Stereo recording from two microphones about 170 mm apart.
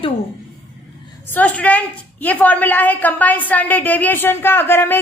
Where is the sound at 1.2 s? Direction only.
10° left (ahead or behind).